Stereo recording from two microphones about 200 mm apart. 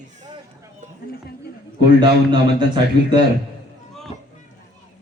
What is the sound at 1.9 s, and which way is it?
Speech, 20° right (ahead or behind).